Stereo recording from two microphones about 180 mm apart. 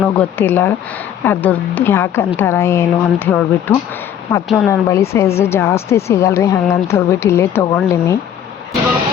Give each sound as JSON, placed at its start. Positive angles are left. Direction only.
{"t": 0.0, "sound": "speech", "side_deg": 10}
{"t": 4.4, "sound": "speech", "side_deg": 0}
{"t": 4.7, "sound": "speech", "side_deg": 15}